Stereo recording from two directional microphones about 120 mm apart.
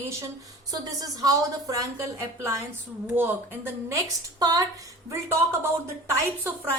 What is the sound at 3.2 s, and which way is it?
Speech, 20° right (ahead or behind).